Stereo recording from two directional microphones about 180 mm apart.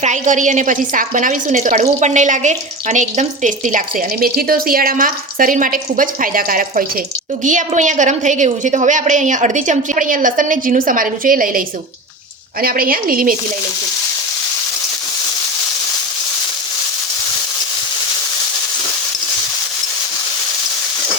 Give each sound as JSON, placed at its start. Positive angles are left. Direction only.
{"t": 0.0, "sound": "a woman's voice", "side_deg": -40}
{"t": 12.6, "sound": "a woman's voice", "side_deg": -55}